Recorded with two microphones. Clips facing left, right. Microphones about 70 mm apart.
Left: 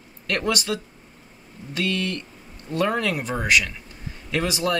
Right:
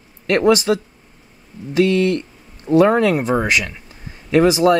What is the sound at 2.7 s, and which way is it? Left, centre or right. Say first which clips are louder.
Speech: right 14 dB; right.